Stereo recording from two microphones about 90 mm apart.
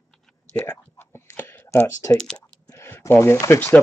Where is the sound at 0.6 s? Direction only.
25° left (ahead or behind).